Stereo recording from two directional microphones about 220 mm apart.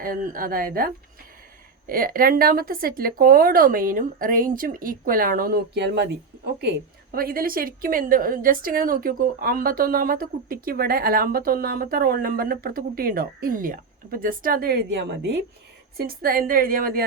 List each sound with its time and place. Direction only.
0.0 s speech: 40° right (ahead or behind)
1.9 s speech: 40° right (ahead or behind)